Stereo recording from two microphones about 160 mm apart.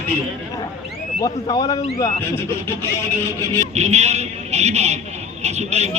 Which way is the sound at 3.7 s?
45° right (ahead or behind).